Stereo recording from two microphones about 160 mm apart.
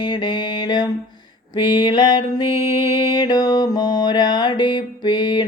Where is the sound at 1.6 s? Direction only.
30° left (ahead or behind).